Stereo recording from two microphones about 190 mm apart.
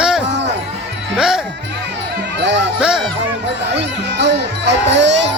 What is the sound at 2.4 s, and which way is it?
Speech, 65° right (ahead or behind).